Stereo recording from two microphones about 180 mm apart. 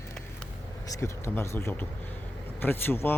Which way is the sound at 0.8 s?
15° left (ahead or behind).